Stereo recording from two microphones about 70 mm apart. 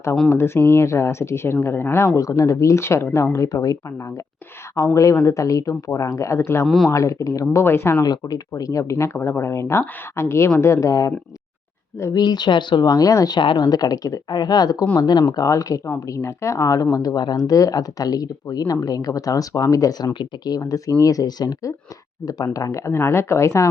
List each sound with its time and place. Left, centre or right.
0.3 s speech: left
2.1 s speech: left
3.3 s speech: left
4.9 s speech: left
6.7 s speech: centre
6.9 s speech: left
7.5 s speech: left
8.0 s speech: left
12.1 s speech: left
14.9 s speech: left
15.4 s speech: left
16.9 s speech: left
22.5 s speech: left